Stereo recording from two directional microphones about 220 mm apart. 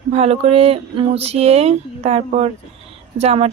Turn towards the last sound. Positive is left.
turn(degrees=-30)  # may be behind; listen again after turning